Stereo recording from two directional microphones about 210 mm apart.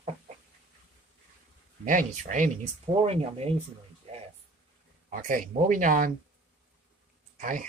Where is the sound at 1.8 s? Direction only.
40° right (ahead or behind).